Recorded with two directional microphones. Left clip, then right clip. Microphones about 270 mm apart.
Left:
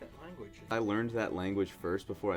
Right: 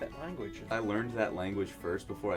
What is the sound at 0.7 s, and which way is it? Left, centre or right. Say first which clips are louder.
Speech: left 1 dB; left.